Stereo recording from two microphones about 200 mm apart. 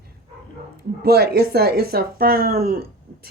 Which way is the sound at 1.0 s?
50° right (ahead or behind).